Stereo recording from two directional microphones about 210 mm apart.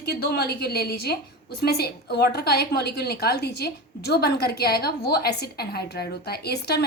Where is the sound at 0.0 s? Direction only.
50° left (ahead or behind).